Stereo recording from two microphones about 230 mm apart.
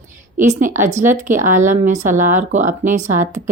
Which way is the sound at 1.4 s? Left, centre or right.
Right.